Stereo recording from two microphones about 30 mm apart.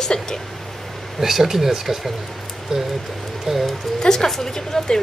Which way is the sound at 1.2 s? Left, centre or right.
Centre.